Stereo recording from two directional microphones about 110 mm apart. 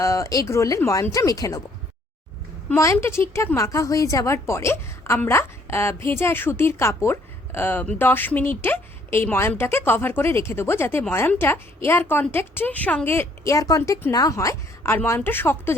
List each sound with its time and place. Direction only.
0.0 s speech: 30° left (ahead or behind)
2.6 s speech: 25° left (ahead or behind)